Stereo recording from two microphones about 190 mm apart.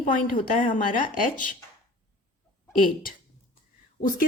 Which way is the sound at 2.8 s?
45° left (ahead or behind).